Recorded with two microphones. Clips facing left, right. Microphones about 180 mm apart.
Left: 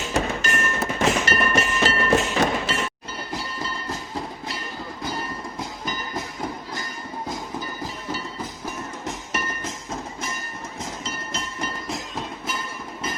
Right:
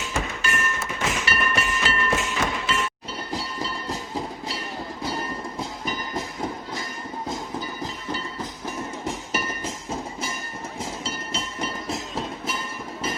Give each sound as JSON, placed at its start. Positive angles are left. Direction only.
{"t": 0.1, "sound": "train", "side_deg": 40}
{"t": 11.3, "sound": "train", "side_deg": 0}